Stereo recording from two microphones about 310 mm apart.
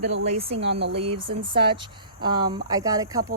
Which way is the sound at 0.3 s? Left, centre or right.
Centre.